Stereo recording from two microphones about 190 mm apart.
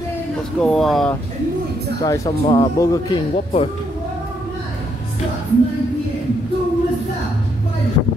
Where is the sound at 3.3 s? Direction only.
35° left (ahead or behind).